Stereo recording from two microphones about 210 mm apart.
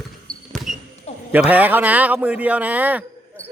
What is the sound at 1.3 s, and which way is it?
A man's voice, 10° right (ahead or behind).